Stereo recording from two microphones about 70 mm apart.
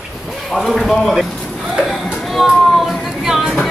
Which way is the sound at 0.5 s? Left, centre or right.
Centre.